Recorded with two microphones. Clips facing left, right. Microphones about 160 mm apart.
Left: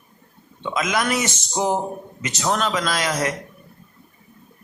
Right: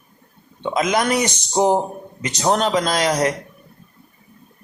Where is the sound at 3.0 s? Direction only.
35° right (ahead or behind).